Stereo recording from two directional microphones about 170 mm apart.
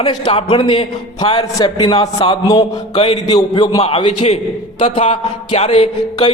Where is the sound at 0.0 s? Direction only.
30° left (ahead or behind).